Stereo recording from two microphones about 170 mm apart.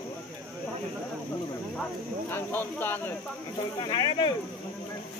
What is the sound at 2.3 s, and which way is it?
Speech, 10° left (ahead or behind).